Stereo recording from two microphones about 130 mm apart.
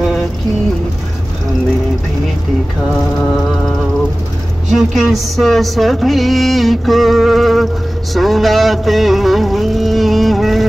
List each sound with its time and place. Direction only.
3.2 s music: 5° left (ahead or behind)